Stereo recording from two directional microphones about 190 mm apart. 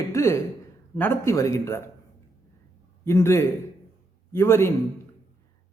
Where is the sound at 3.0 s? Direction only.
15° left (ahead or behind).